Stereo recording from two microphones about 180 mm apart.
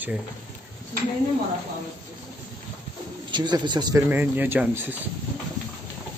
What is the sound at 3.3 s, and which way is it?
Speech, 25° right (ahead or behind).